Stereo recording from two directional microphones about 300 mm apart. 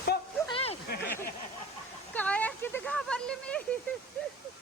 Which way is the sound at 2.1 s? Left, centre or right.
Centre.